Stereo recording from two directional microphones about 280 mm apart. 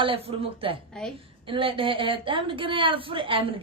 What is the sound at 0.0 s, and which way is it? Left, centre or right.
A woman's voice, centre.